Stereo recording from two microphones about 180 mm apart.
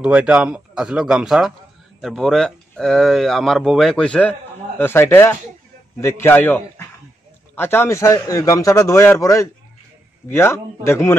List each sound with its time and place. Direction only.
0.0 s a man's voice: 5° right (ahead or behind); by 11.1 s 15° left (ahead or behind)